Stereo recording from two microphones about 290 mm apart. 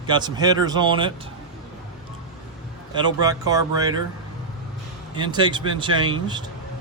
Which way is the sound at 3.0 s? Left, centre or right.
Centre.